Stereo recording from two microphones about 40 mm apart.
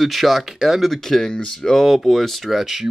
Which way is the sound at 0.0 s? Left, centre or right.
Centre.